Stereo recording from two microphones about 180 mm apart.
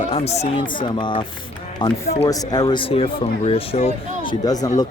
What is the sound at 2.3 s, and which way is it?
Speech, 20° left (ahead or behind).